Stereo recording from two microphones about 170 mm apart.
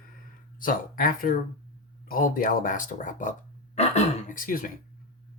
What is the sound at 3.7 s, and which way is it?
Speech, 40° left (ahead or behind).